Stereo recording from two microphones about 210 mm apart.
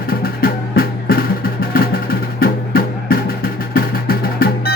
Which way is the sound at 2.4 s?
45° left (ahead or behind).